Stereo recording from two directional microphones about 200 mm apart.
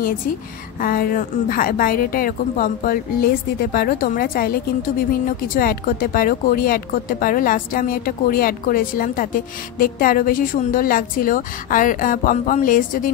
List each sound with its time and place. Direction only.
0.7 s speech: 45° left (ahead or behind)